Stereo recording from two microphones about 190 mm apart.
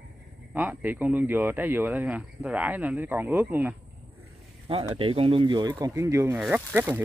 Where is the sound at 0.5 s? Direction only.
10° right (ahead or behind).